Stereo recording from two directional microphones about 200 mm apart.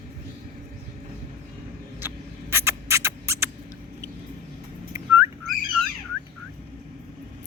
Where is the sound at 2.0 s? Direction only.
10° right (ahead or behind).